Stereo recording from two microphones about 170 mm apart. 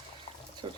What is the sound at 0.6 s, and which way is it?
Speech, 25° right (ahead or behind).